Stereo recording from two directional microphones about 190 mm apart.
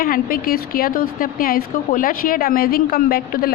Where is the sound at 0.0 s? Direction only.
50° left (ahead or behind).